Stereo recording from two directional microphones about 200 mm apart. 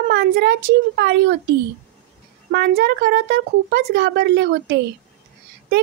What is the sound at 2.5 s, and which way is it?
Speech, 55° right (ahead or behind).